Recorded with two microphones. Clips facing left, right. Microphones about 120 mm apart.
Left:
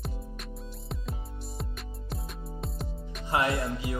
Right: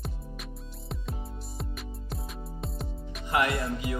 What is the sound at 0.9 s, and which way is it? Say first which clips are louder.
Music: right 2 dB; centre (ahead or behind).